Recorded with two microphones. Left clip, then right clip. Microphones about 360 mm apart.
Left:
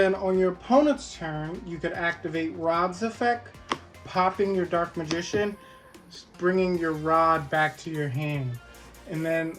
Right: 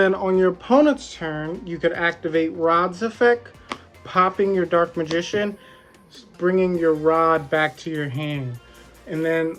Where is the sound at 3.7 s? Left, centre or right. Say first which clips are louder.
Left 2 dB; centre.